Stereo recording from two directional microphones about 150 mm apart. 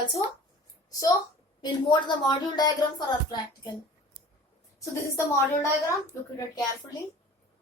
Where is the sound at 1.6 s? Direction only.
30° left (ahead or behind).